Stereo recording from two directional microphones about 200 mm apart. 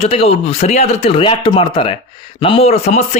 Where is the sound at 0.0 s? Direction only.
30° left (ahead or behind).